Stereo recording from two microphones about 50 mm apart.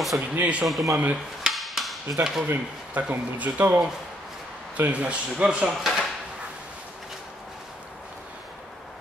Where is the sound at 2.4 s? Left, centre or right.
Right.